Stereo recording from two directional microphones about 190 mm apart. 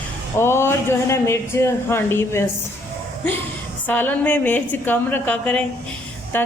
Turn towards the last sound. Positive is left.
turn(degrees=10)  # may be behind; listen again after turning